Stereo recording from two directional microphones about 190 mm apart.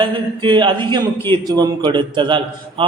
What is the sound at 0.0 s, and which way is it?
A man's voice, 25° right (ahead or behind).